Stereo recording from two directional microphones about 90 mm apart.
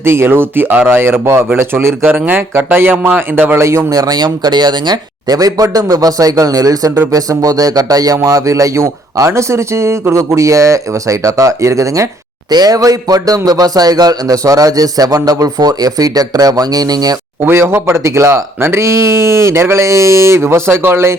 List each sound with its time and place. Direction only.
0.0 s speech: 30° right (ahead or behind)
12.5 s speech: 50° right (ahead or behind)
17.4 s speech: 25° right (ahead or behind)